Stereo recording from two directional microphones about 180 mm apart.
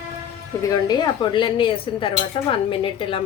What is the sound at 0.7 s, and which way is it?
A woman's voice, 25° left (ahead or behind).